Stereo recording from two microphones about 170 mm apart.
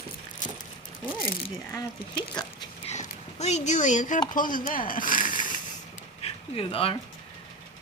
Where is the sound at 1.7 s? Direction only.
25° left (ahead or behind).